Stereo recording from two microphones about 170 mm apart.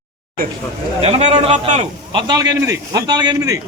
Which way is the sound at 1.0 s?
40° right (ahead or behind).